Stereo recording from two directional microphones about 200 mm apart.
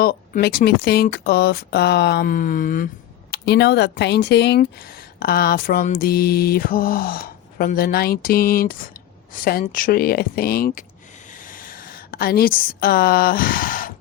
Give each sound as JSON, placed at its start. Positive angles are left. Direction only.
{"t": 0.0, "sound": "speech", "side_deg": 50}
{"t": 3.3, "sound": "speech", "side_deg": 55}
{"t": 11.3, "sound": "a sound", "side_deg": 40}